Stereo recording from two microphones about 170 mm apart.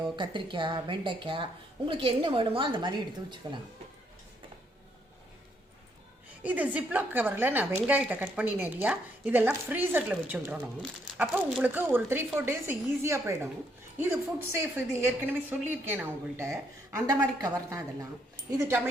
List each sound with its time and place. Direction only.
0.2 s a woman's voice: 25° right (ahead or behind)
6.4 s a woman's voice: 10° right (ahead or behind)